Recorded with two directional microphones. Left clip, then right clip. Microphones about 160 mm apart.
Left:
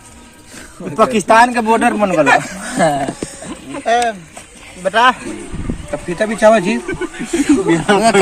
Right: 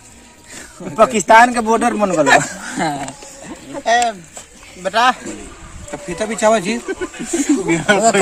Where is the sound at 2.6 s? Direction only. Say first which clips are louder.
Left 6 dB; 70° left (ahead or behind).